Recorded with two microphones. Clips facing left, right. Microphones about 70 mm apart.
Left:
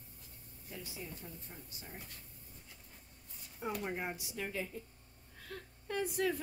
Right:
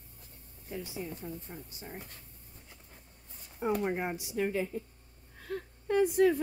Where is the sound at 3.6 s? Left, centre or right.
Right.